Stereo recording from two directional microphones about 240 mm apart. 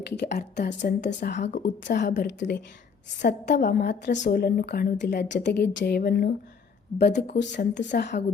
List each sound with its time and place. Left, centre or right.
0.2 s a woman's voice: left